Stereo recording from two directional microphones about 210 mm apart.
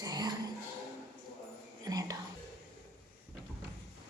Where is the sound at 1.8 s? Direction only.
15° right (ahead or behind).